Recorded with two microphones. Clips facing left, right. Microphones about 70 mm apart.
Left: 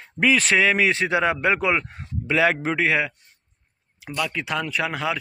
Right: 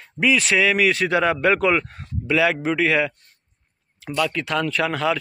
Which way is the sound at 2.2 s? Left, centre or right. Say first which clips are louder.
Right 1 dB; left.